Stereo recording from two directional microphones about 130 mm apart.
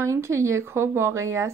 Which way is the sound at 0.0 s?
20° right (ahead or behind).